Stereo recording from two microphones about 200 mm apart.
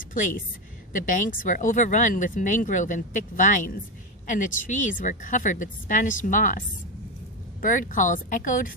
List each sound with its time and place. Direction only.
0.0 s a woman's voice: 40° left (ahead or behind)
7.6 s speech: 40° left (ahead or behind)